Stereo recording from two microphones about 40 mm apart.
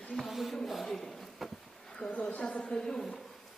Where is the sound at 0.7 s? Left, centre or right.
Centre.